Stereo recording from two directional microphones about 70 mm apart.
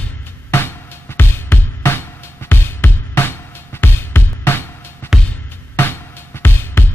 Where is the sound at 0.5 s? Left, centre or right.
Left.